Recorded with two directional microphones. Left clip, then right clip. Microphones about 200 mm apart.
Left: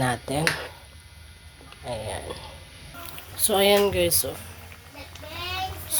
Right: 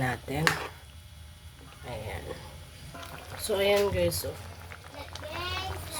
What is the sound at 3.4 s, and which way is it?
Speech, 30° left (ahead or behind).